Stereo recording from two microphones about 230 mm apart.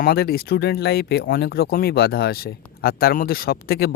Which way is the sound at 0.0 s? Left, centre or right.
Left.